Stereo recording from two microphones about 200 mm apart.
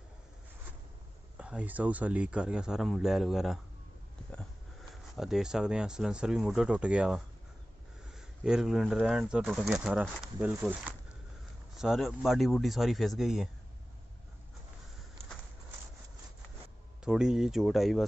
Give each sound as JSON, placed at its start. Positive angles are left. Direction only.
{"t": 1.4, "sound": "speech", "side_deg": -5}
{"t": 17.0, "sound": "speech", "side_deg": -5}